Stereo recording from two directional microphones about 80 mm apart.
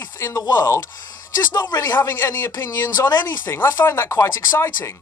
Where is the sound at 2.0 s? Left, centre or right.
Left.